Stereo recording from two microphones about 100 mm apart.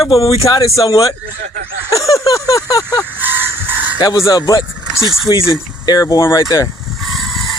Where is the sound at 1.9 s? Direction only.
30° left (ahead or behind).